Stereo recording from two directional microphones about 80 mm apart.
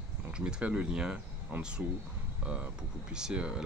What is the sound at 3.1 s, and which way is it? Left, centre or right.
Speech, centre.